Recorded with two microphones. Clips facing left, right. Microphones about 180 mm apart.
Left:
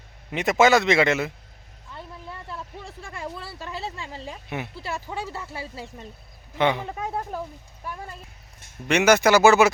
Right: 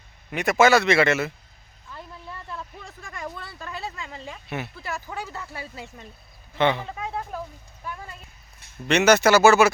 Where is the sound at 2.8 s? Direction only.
30° left (ahead or behind).